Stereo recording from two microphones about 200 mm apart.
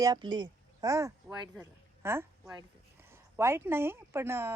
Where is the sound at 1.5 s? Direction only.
10° right (ahead or behind).